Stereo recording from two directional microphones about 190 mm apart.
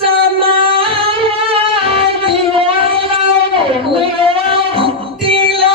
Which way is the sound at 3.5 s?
30° right (ahead or behind).